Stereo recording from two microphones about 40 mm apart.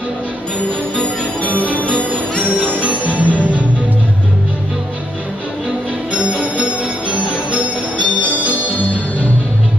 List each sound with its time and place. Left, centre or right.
1.5 s music: right
2.3 s music: left
2.8 s music: right
6.6 s music: right